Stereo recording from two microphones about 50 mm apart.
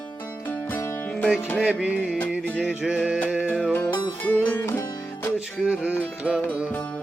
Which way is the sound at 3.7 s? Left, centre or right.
Left.